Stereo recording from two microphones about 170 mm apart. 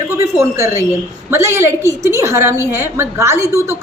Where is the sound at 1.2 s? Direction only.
15° right (ahead or behind).